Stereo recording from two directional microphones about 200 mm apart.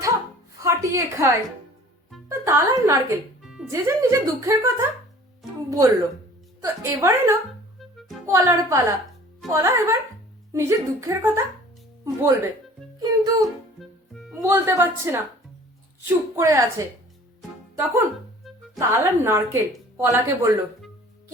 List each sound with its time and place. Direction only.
0.6 s a woman's voice: 15° right (ahead or behind)
2.4 s speech: 15° right (ahead or behind)
3.4 s music: 5° right (ahead or behind)
3.7 s speech: 15° right (ahead or behind)
7.8 s music: centre (ahead or behind)
8.3 s speech: 15° right (ahead or behind)
13.0 s music: 20° right (ahead or behind)
13.7 s music: centre (ahead or behind)
14.4 s speech: 10° right (ahead or behind)
18.8 s speech: 15° right (ahead or behind)